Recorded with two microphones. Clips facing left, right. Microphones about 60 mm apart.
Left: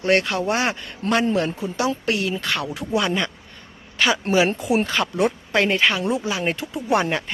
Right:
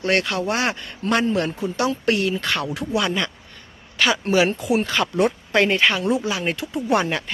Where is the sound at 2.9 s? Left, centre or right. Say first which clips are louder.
Left 1 dB; left.